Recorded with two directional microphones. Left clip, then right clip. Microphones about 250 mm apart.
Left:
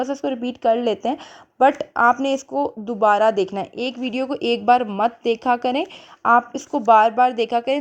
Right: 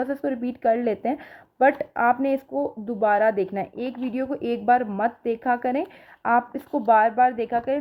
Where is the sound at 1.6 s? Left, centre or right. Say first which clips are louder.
Left 4 dB; centre.